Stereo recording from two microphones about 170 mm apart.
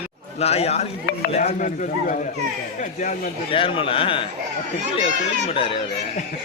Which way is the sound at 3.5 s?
30° left (ahead or behind).